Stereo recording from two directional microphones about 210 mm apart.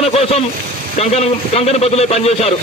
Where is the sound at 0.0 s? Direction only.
30° left (ahead or behind).